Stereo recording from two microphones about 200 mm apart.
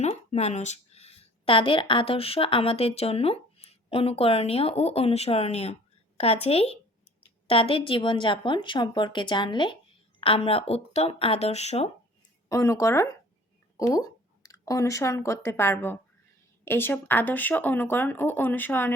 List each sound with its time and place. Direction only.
0.0 s a woman's voice: 30° left (ahead or behind)
12.5 s speech: 15° left (ahead or behind)